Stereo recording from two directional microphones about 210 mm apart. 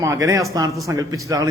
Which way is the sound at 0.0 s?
15° right (ahead or behind).